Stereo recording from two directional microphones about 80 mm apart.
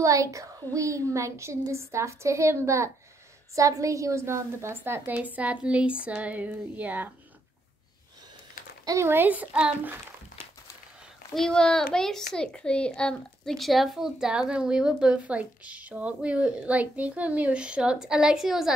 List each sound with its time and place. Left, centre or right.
0.0 s a woman's voice: right
9.0 s a woman's voice: right
11.3 s a child's voice: centre